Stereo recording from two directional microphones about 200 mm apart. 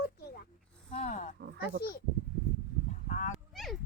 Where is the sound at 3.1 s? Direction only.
40° left (ahead or behind).